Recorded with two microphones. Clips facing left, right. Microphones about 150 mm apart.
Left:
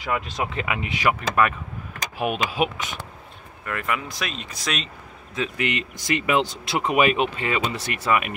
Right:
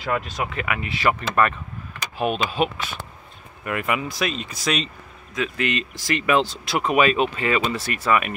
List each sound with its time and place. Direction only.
0.0 s speech: 20° left (ahead or behind)
2.1 s speech: 10° left (ahead or behind)
3.6 s speech: 10° right (ahead or behind)
5.3 s speech: 25° left (ahead or behind)